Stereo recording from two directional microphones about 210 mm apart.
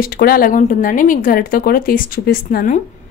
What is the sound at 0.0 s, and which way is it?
Speech, 45° left (ahead or behind).